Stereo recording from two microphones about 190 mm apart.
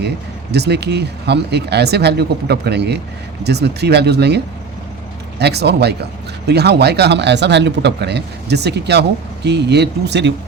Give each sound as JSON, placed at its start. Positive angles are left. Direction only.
{"t": 0.5, "sound": "speech", "side_deg": -60}
{"t": 5.4, "sound": "speech", "side_deg": -60}